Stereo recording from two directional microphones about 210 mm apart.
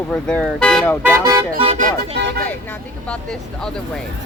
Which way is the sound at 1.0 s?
15° right (ahead or behind).